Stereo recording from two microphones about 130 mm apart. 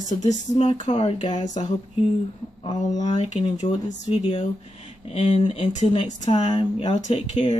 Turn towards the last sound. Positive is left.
turn(degrees=60)  # may be behind; listen again after turning